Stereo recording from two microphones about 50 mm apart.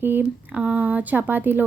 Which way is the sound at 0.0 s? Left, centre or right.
Right.